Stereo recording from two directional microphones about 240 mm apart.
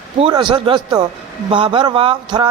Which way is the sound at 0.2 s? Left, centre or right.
Centre.